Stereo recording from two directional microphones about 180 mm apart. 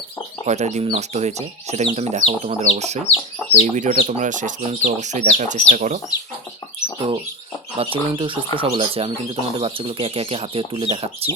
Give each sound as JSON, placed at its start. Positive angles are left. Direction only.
{"t": 0.4, "sound": "speech", "side_deg": -40}
{"t": 7.8, "sound": "speech", "side_deg": -30}